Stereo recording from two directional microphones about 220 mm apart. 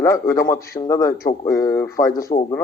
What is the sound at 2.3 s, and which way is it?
Speech, 35° left (ahead or behind).